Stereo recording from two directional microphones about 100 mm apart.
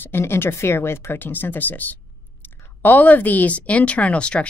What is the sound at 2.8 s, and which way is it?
Speech, 20° left (ahead or behind).